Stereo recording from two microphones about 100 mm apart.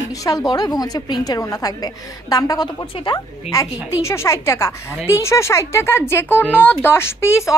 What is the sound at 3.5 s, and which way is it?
Speech, 80° left.